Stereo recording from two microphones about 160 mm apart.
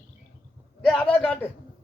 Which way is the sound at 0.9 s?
5° left (ahead or behind).